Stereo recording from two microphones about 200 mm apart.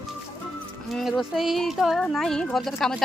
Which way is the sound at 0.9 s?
Centre (ahead or behind).